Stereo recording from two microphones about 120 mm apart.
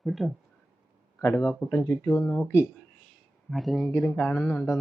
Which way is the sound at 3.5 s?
Centre (ahead or behind).